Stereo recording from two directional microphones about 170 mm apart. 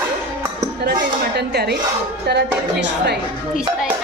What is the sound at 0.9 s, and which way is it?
Speech, 70° right (ahead or behind).